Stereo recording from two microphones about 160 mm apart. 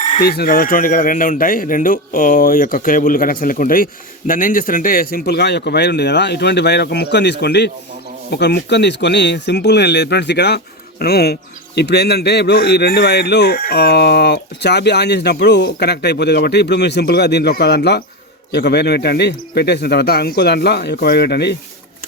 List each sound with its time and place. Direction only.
0.2 s speech: 75° left (ahead or behind); by 21.5 s 90° left